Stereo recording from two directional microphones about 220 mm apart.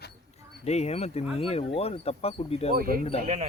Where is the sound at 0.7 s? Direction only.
30° left (ahead or behind).